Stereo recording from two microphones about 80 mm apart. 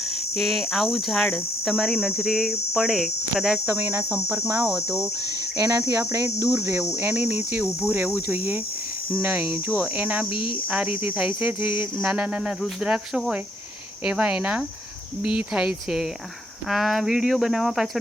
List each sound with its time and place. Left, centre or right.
0.3 s speech: centre
3.7 s cricket: right
9.1 s speech: centre